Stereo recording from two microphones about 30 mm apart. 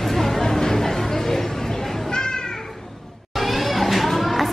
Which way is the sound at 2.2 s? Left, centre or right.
Left.